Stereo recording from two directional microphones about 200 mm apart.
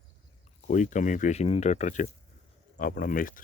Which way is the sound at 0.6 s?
40° left (ahead or behind).